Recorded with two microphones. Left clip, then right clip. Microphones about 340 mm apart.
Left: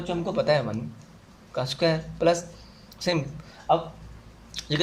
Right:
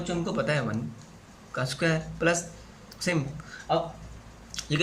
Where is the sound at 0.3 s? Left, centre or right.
Centre.